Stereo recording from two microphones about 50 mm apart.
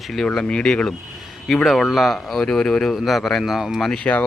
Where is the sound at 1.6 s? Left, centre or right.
Centre.